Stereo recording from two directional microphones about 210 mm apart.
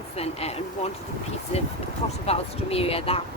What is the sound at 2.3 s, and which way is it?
Speech, 30° left (ahead or behind).